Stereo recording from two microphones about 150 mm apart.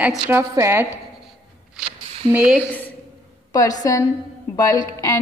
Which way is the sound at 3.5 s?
25° left (ahead or behind).